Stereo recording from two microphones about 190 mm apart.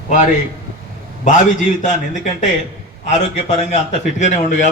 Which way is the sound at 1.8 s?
40° left (ahead or behind).